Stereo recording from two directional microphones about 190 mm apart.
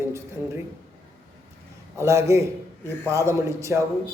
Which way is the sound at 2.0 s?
15° right (ahead or behind).